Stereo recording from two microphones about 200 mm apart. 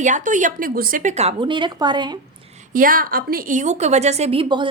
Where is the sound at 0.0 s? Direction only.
40° right (ahead or behind); by 2.1 s 20° right (ahead or behind).